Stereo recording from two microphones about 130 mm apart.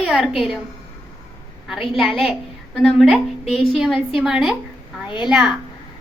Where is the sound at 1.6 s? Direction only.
Centre (ahead or behind).